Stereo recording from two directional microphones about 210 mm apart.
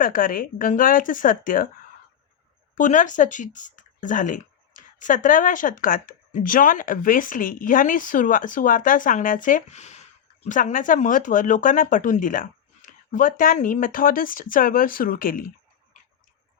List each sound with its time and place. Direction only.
0.0 s speech: 40° left (ahead or behind)
2.7 s speech: 35° left (ahead or behind)